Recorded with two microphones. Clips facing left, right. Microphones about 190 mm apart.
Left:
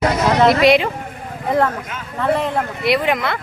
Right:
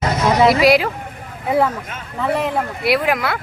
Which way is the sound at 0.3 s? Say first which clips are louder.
Even; 5° right (ahead or behind).